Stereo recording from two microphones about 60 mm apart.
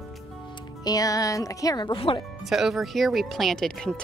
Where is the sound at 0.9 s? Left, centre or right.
Left.